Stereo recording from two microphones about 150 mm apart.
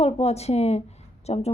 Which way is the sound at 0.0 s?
45° left (ahead or behind).